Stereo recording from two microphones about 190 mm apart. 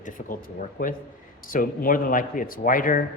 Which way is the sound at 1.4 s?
50° left (ahead or behind).